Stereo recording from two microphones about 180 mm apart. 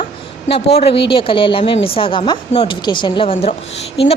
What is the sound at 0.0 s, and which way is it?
A woman's voice, 35° left (ahead or behind).